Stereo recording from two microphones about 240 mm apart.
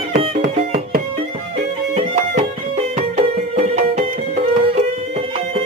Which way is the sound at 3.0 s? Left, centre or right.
Right.